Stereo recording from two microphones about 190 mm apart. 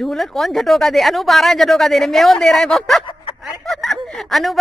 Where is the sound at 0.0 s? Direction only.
Centre (ahead or behind).